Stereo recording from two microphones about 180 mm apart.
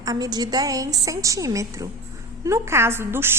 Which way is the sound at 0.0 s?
20° right (ahead or behind).